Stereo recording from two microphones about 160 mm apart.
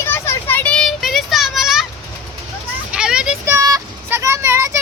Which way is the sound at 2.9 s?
5° right (ahead or behind).